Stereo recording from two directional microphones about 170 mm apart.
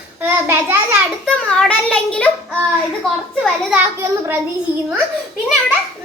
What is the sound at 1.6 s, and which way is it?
Speech, 5° left (ahead or behind).